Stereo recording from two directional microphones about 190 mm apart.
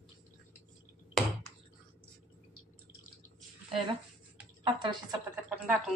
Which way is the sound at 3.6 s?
30° right (ahead or behind).